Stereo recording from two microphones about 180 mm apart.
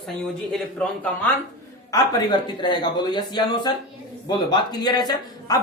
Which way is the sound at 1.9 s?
25° left (ahead or behind).